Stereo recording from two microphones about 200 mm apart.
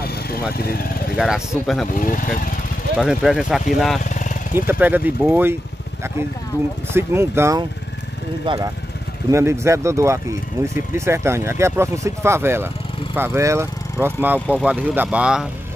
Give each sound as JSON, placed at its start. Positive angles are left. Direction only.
{"t": 0.0, "sound": "speech", "side_deg": 50}
{"t": 1.1, "sound": "speech", "side_deg": -5}
{"t": 2.0, "sound": "speech", "side_deg": 45}
{"t": 3.0, "sound": "speech", "side_deg": 0}
{"t": 4.0, "sound": "vehicle", "side_deg": 40}
{"t": 4.6, "sound": "speech", "side_deg": -10}
{"t": 6.9, "sound": "speech", "side_deg": -10}